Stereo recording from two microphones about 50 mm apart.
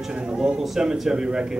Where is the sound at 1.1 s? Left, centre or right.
Centre.